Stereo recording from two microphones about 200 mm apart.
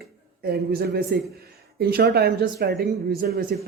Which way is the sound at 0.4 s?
50° right (ahead or behind).